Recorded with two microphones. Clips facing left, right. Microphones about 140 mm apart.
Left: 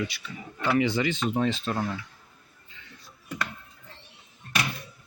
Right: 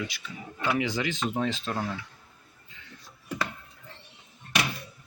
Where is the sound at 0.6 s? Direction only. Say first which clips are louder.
Left 4 dB; 5° right (ahead or behind).